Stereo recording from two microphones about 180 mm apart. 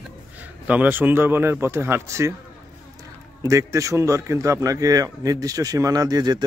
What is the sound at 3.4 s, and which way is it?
A man's voice, 15° right (ahead or behind).